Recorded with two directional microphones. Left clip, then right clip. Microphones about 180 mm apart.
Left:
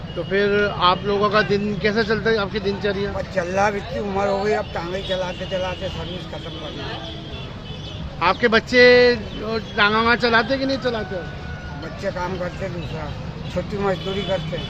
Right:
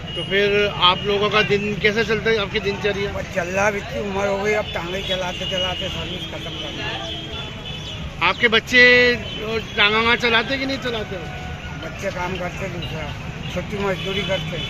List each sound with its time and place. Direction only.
0.3 s speech: 40° left (ahead or behind)
3.3 s speech: 20° left (ahead or behind)
4.2 s speech: 5° left (ahead or behind)
8.2 s speech: 40° left (ahead or behind)